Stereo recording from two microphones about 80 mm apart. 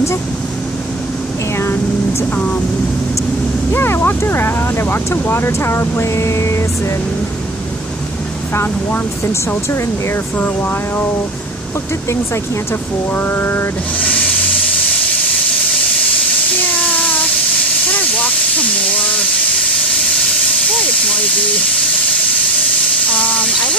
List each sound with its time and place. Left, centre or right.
1.6 s speech: left
2.3 s speech: centre
3.7 s speech: left
8.5 s speech: left
13.1 s speech: left
14.0 s a sound: centre
16.7 s child singing: centre
17.8 s hiss: centre
23.0 s steam: centre